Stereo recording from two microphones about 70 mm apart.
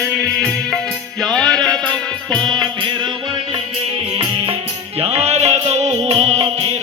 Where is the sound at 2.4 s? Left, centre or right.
Right.